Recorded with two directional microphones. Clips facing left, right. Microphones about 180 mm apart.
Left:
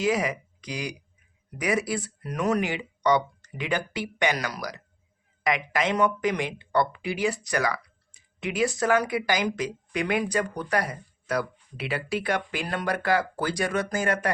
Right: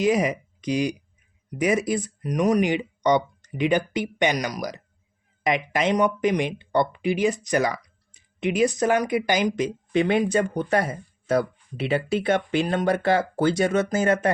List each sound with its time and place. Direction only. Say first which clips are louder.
0.0 s speech: right 4 dB; 20° right (ahead or behind)